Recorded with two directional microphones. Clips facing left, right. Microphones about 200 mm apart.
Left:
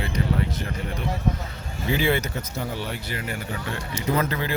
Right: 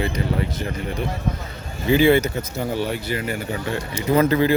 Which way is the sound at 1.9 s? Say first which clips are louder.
Right 8 dB; 5° right (ahead or behind).